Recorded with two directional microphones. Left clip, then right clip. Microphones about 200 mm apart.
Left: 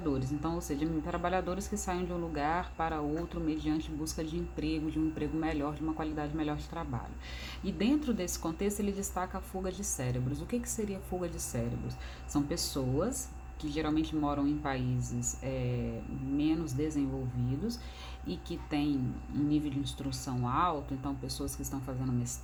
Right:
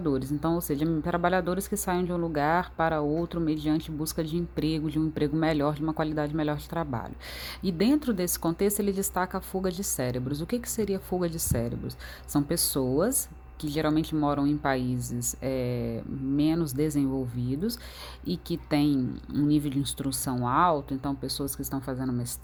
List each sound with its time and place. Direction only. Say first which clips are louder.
0.0 s a woman's voice: right 6 dB; 40° right (ahead or behind)
18.3 s a woman's voice: right 8 dB; 45° right (ahead or behind)